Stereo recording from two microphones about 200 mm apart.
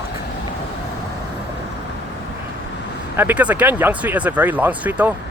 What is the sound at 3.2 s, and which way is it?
Speech, 10° right (ahead or behind).